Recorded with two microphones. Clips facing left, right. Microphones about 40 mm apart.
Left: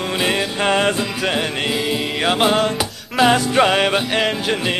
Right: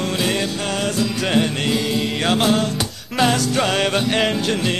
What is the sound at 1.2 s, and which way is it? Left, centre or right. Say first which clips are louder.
Music: right 1 dB; centre.